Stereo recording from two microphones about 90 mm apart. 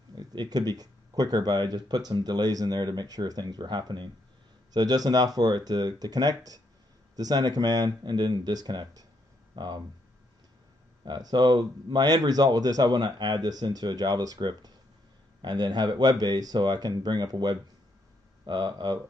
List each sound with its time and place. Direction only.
0.1 s speech: 50° right (ahead or behind)
11.1 s speech: 50° right (ahead or behind)